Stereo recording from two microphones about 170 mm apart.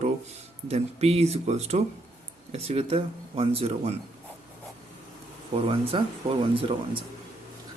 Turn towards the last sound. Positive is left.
turn(degrees=-35)  # may be behind; listen again after turning